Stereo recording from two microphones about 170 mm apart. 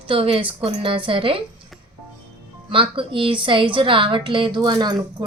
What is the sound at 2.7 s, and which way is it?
A woman's voice, 30° right (ahead or behind).